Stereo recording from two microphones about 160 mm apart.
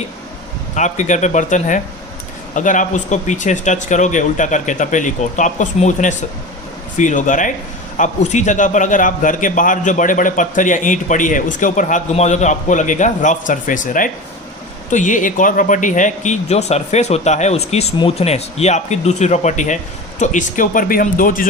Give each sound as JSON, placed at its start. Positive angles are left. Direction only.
{"t": 0.8, "sound": "a man's voice", "side_deg": 50}